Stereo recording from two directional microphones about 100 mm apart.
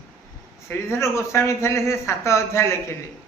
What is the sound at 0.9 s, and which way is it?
A man's voice, 30° left (ahead or behind).